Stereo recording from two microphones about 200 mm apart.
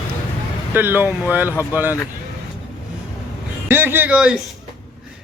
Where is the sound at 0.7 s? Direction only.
10° right (ahead or behind).